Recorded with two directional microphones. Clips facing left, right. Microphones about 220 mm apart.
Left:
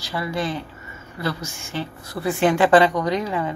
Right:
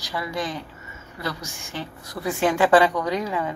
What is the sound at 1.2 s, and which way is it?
Speech, 15° right (ahead or behind).